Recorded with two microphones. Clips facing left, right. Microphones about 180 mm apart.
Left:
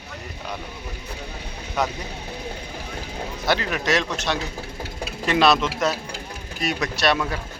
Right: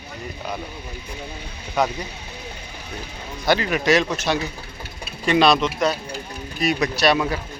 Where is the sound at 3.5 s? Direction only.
Centre (ahead or behind).